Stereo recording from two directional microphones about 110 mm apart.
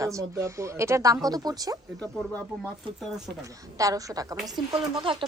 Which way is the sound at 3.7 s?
30° right (ahead or behind).